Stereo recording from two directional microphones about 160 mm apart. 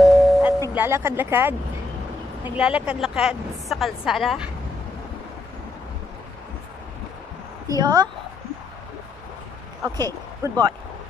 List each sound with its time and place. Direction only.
0.0 s music: 5° right (ahead or behind)
0.7 s a woman's voice: 15° right (ahead or behind)
7.6 s a woman's voice: 25° right (ahead or behind)
9.9 s speech: 25° right (ahead or behind)